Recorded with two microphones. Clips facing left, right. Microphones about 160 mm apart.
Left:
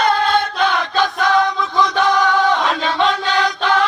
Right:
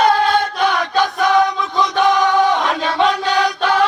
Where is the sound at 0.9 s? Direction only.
15° right (ahead or behind).